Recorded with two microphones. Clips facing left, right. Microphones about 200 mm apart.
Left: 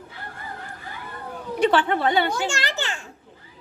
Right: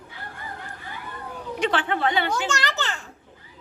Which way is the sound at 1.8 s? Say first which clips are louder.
Left 2 dB; 40° left (ahead or behind).